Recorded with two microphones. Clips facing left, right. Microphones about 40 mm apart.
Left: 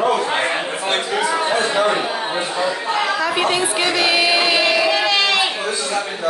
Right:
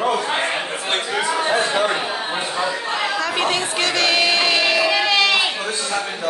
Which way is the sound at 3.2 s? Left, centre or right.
Centre.